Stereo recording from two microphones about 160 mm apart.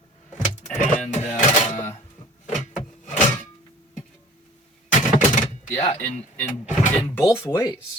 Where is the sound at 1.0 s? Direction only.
45° left (ahead or behind).